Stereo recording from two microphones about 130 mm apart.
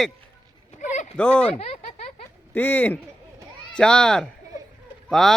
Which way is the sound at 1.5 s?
55° left (ahead or behind).